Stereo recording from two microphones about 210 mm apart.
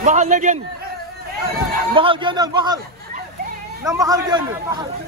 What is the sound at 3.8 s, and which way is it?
A man's voice, 15° right (ahead or behind).